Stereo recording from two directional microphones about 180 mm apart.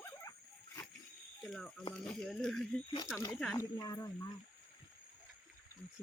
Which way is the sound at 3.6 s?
20° left (ahead or behind).